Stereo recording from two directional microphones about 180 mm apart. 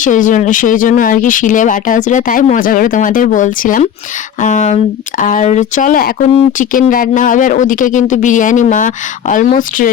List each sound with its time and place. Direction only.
0.0 s speech: 45° left (ahead or behind)